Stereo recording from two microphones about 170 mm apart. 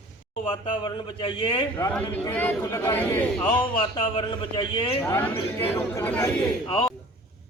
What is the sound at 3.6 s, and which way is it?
Speech, 30° left (ahead or behind).